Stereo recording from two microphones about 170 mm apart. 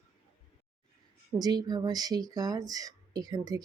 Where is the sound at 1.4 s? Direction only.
25° right (ahead or behind).